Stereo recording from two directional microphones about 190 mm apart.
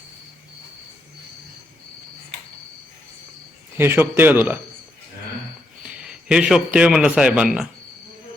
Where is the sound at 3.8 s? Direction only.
10° right (ahead or behind).